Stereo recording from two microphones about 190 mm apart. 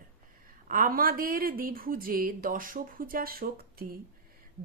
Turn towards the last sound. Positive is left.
turn(degrees=-50)  # may be behind; listen again after turning